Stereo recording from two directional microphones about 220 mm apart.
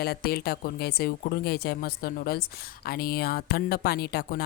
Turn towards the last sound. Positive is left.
turn(degrees=45)  # may be behind; listen again after turning